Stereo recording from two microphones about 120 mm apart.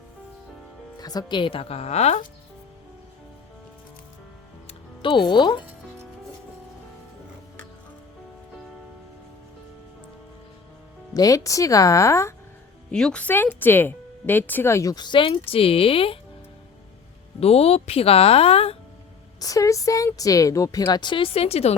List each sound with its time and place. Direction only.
0.9 s speech: 35° left (ahead or behind); by 2.2 s 65° left (ahead or behind)
4.6 s music: 45° left (ahead or behind)
11.1 s speech: 30° left (ahead or behind)
12.9 s speech: 5° left (ahead or behind); by 16.1 s 50° left (ahead or behind)
17.4 s speech: 55° left (ahead or behind)
19.4 s speech: 30° left (ahead or behind)
20.8 s speech: 40° left (ahead or behind); by 21.8 s 60° left (ahead or behind)